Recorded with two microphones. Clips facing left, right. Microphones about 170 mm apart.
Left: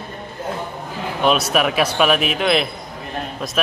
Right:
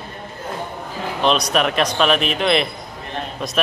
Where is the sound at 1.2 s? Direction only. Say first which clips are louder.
Left 1 dB; 5° left (ahead or behind).